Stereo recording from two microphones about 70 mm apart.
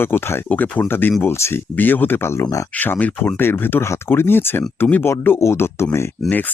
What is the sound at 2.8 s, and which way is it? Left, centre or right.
Speech, left.